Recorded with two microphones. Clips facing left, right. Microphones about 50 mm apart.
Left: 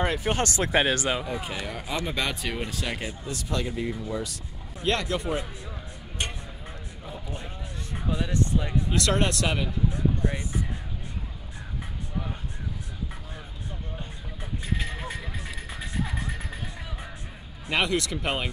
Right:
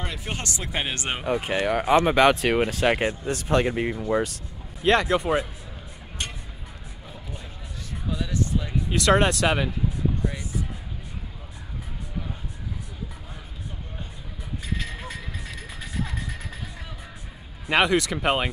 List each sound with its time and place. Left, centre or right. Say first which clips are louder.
0.0 s speech: left 7 dB; left
1.2 s speech: right 8 dB; right
4.8 s speech: right 6 dB; right
8.1 s speech: even; left
9.0 s speech: right 8 dB; right
10.2 s speech: left 1 dB; left
14.8 s vehicle: left 1 dB; centre
15.4 s music: left 1 dB; centre
17.6 s speech: right 5 dB; right